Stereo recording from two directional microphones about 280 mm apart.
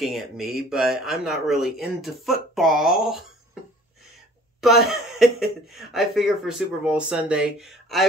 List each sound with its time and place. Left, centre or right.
0.0 s speech: centre
4.6 s speech: centre